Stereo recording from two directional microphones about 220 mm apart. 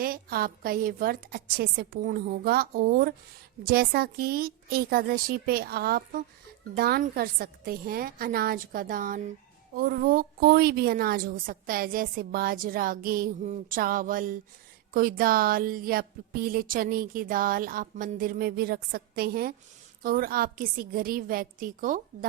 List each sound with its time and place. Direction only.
0.0 s a woman's voice: 40° right (ahead or behind)